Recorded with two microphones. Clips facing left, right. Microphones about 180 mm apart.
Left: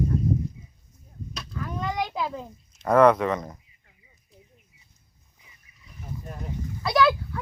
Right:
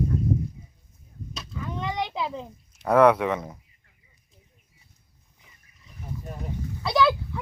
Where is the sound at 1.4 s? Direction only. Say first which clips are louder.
Left 1 dB; centre (ahead or behind).